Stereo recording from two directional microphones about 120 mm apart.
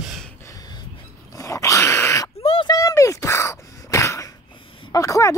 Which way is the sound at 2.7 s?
30° left (ahead or behind).